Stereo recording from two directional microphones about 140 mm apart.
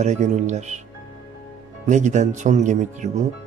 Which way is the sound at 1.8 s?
60° right (ahead or behind).